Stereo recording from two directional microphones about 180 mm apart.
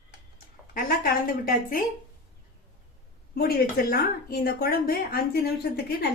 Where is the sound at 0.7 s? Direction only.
55° left (ahead or behind).